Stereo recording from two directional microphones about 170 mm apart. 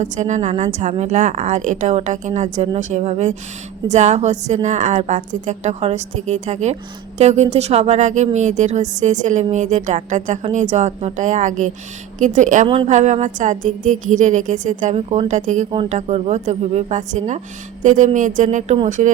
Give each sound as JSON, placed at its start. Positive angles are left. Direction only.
{"t": 0.0, "sound": "speech", "side_deg": -45}
{"t": 12.6, "sound": "speech", "side_deg": -30}
{"t": 12.9, "sound": "speech", "side_deg": -45}